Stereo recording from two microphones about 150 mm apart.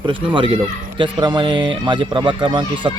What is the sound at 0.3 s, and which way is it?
Speech, 35° right (ahead or behind).